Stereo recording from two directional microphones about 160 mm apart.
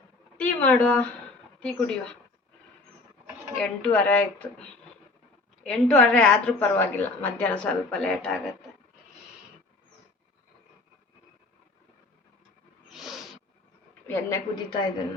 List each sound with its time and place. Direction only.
0.3 s speech: 10° left (ahead or behind)
3.6 s a woman's voice: 5° left (ahead or behind)
5.6 s a woman's voice: 5° left (ahead or behind)
12.9 s a sound: centre (ahead or behind)
14.1 s a woman's voice: 15° left (ahead or behind)